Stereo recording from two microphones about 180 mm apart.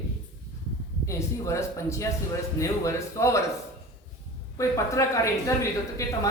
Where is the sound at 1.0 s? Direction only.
15° left (ahead or behind).